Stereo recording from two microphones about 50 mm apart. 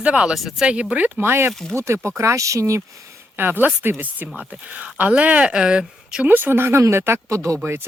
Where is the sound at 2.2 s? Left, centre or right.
Right.